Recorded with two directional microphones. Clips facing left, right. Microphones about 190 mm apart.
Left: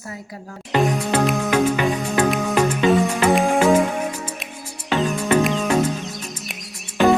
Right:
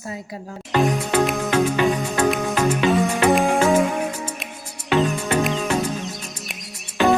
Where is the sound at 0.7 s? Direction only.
Centre (ahead or behind).